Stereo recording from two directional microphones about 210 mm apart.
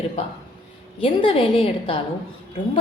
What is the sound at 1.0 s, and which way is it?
Speech, 25° left (ahead or behind).